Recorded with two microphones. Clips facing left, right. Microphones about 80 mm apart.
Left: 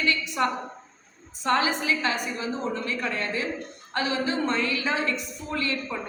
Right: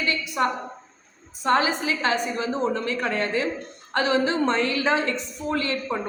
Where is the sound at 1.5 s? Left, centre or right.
Right.